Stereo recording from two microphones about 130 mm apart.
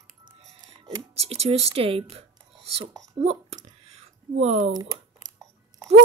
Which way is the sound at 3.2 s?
60° right (ahead or behind).